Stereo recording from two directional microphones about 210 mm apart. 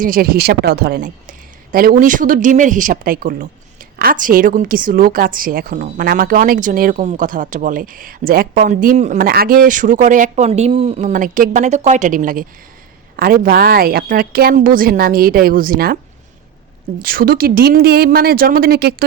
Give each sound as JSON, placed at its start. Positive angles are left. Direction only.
{"t": 0.0, "sound": "a woman's voice", "side_deg": -45}
{"t": 17.0, "sound": "a woman's voice", "side_deg": -45}